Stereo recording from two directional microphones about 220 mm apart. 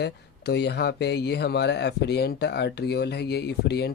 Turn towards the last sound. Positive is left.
turn(degrees=45)  # may be behind; listen again after turning